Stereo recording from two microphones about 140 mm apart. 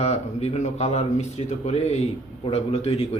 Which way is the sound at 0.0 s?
50° left (ahead or behind).